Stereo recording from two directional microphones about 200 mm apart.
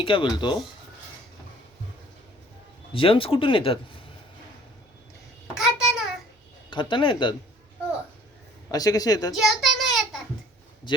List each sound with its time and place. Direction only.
0.0 s speech: 25° left (ahead or behind)
2.9 s speech: 25° left (ahead or behind)
5.5 s a sound: centre (ahead or behind)
6.7 s speech: 25° left (ahead or behind)
8.7 s speech: 20° left (ahead or behind)
9.3 s child singing: centre (ahead or behind)
10.9 s speech: 25° left (ahead or behind)